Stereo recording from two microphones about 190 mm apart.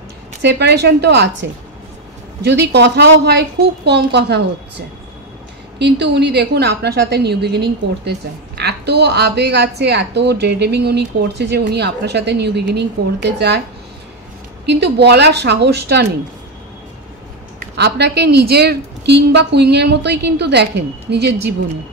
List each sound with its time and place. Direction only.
0.4 s a woman's voice: 60° right (ahead or behind)
5.8 s a woman's voice: 65° right (ahead or behind)
14.7 s a woman's voice: 60° right (ahead or behind)
17.6 s a woman's voice: 60° right (ahead or behind)